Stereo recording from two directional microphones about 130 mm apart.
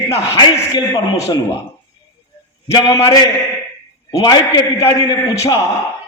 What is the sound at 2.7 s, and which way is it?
A man's voice, 25° left (ahead or behind).